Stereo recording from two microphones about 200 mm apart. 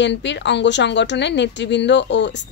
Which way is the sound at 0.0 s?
60° left (ahead or behind).